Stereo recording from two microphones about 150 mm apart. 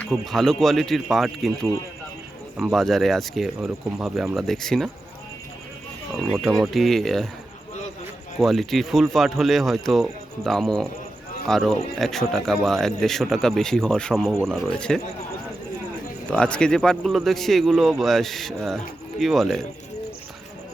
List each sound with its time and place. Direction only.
0.0 s speech: centre (ahead or behind)
2.6 s speech: centre (ahead or behind)
6.2 s speech: centre (ahead or behind)
8.4 s speech: centre (ahead or behind)
16.3 s speech: 5° left (ahead or behind)